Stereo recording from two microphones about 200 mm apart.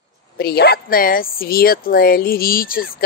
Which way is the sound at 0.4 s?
55° left (ahead or behind).